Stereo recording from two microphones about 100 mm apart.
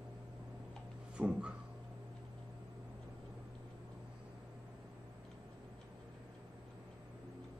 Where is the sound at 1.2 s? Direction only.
10° right (ahead or behind).